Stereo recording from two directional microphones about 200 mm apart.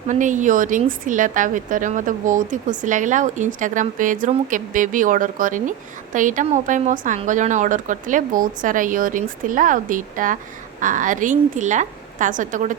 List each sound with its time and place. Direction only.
0.1 s a woman's voice: 40° right (ahead or behind)